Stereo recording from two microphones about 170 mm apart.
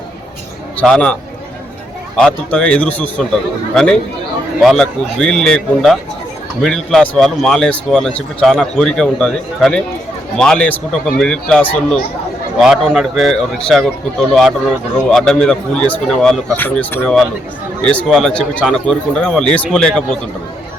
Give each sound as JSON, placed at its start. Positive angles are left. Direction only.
{"t": 0.8, "sound": "speech", "side_deg": 5}
{"t": 2.1, "sound": "a man's voice", "side_deg": 5}
{"t": 4.6, "sound": "speech", "side_deg": 0}